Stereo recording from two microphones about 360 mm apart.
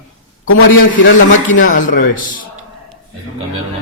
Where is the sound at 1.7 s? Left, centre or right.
Left.